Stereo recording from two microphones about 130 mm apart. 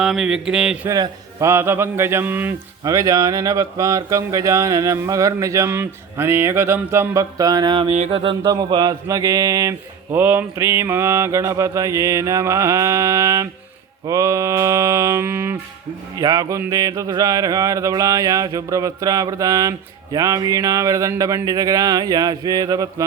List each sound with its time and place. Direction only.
0.0 s mantra: 5° right (ahead or behind)
0.9 s speech: 25° right (ahead or behind)
2.8 s speech: 25° right (ahead or behind)
7.9 s music: 65° right (ahead or behind)
8.1 s speech: 40° right (ahead or behind)
10.2 s speech: 15° right (ahead or behind)
16.1 s speech: 30° right (ahead or behind)